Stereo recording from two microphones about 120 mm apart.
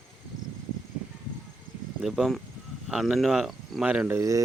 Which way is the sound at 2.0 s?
Centre (ahead or behind).